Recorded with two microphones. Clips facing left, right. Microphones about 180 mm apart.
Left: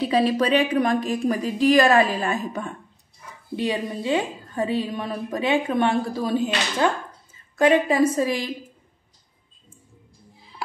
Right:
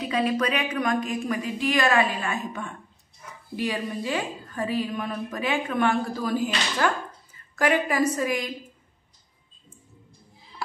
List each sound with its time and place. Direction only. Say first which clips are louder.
0.0 s a woman's voice: left 4 dB; 30° left (ahead or behind)
3.5 s a woman's voice: left 3 dB; 25° left (ahead or behind)